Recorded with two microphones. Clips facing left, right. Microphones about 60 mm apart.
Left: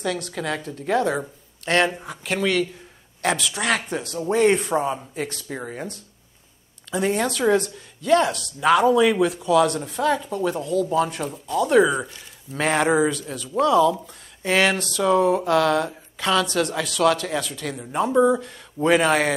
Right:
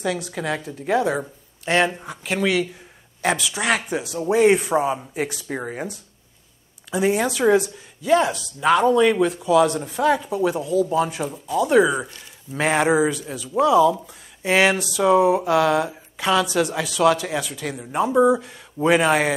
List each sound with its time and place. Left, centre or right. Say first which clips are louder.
0.0 s speech: right 1 dB; centre